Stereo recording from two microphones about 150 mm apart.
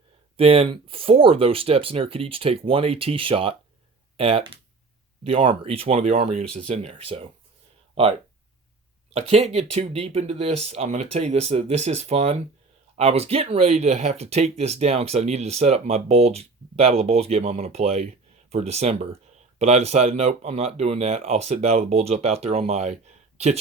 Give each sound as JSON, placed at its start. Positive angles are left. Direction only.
{"t": 0.3, "sound": "speech", "side_deg": -40}
{"t": 9.1, "sound": "speech", "side_deg": -45}